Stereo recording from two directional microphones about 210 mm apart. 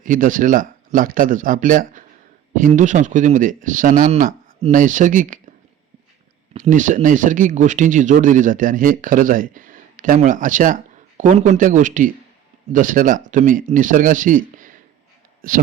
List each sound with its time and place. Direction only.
0.0 s speech: 40° right (ahead or behind)
6.5 s speech: 40° right (ahead or behind)